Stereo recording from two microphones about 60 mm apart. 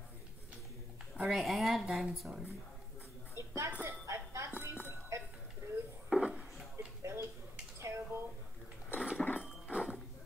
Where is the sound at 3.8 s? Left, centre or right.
Right.